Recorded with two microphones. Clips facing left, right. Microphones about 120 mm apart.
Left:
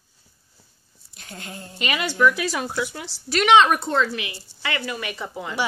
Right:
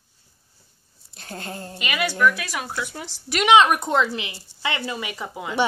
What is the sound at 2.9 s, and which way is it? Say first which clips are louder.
A woman's voice: left 2 dB; 15° right (ahead or behind).